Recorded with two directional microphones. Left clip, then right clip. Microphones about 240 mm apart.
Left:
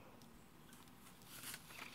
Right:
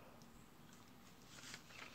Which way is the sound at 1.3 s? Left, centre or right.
Left.